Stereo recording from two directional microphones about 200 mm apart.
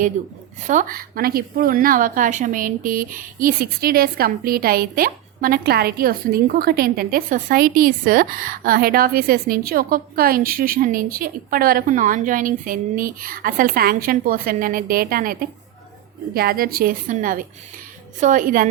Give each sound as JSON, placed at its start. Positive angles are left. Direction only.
{"t": 0.7, "sound": "a woman's voice", "side_deg": -45}